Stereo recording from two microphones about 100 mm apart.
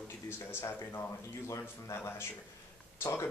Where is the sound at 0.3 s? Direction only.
25° left (ahead or behind).